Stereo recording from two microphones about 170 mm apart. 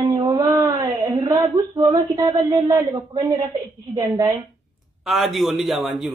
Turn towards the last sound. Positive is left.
turn(degrees=0)  # may be behind; listen again after turning